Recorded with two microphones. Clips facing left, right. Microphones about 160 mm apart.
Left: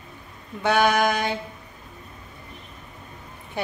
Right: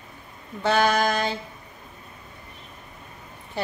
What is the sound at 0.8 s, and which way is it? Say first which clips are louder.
Speech: left 1 dB; 60° left (ahead or behind).